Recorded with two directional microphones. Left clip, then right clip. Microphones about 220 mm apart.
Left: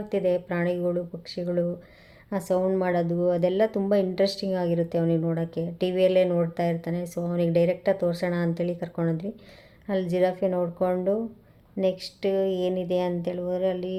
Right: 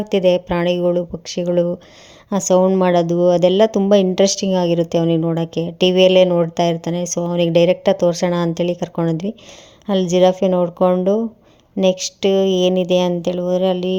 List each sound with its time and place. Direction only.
0.0 s speech: 35° right (ahead or behind)